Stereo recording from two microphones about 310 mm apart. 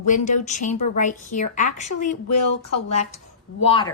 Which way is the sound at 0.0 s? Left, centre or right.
Left.